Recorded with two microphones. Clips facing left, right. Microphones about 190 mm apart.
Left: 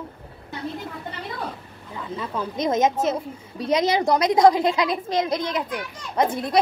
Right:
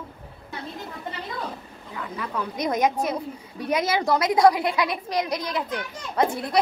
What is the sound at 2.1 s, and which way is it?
A woman's voice, 25° left (ahead or behind).